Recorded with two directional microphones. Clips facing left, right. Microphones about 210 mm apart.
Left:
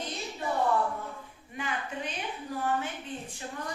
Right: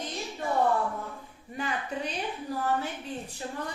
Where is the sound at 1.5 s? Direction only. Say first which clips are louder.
Right 3 dB; 35° right (ahead or behind).